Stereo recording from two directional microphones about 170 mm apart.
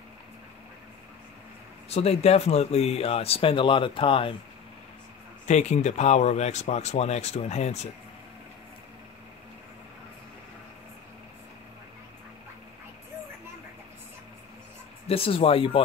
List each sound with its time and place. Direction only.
1.9 s speech: 40° left (ahead or behind)
5.5 s speech: 40° left (ahead or behind)
15.0 s speech: 35° left (ahead or behind)